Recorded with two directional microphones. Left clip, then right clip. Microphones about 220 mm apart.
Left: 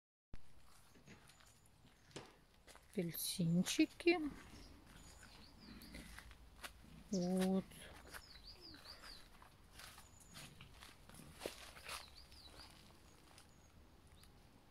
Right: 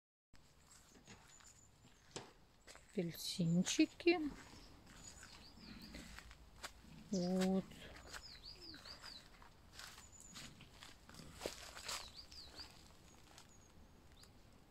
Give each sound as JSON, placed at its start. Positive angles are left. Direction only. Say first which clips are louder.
{"t": 2.1, "sound": "walk", "louder": "right 2 dB", "side_deg": -25}
{"t": 2.7, "sound": "speech", "louder": "right 1 dB", "side_deg": 0}
{"t": 6.1, "sound": "a sound", "louder": "right 1 dB", "side_deg": -5}
{"t": 11.3, "sound": "walk", "louder": "right 2 dB", "side_deg": -5}